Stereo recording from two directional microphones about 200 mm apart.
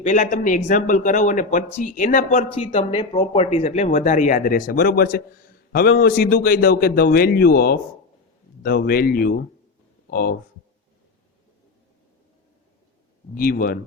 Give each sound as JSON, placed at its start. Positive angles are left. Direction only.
{"t": 0.0, "sound": "speech", "side_deg": 40}
{"t": 13.3, "sound": "speech", "side_deg": 45}